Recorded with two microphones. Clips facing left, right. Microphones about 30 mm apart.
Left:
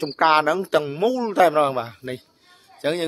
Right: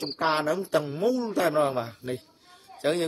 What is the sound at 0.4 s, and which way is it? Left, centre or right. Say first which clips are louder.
A man's voice: left 6 dB; left.